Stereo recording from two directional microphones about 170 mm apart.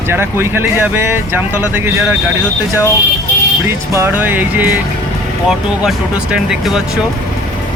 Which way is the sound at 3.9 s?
15° right (ahead or behind).